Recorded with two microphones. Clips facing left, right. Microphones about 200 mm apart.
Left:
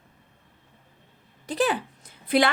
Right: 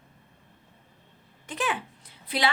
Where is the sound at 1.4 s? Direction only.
35° left (ahead or behind).